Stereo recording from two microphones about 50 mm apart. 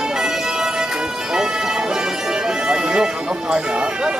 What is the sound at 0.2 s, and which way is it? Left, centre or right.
Music, centre.